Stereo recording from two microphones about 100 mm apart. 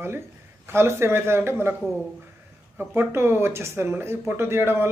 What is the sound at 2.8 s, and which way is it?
Speech, 20° right (ahead or behind).